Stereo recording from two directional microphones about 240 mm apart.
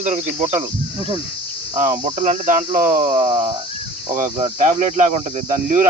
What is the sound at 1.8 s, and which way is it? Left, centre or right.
Cricket, right.